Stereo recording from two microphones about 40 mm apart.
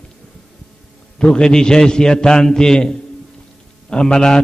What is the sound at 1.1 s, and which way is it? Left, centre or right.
A man's voice, left.